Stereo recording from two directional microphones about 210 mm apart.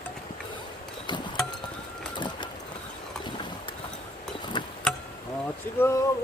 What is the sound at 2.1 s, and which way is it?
Vehicle, 20° left (ahead or behind).